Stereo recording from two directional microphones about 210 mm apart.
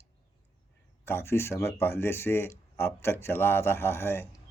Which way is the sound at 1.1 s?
10° left (ahead or behind).